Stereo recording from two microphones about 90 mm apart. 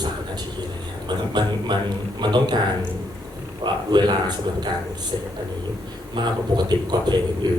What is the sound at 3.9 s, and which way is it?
Speech, 55° right (ahead or behind).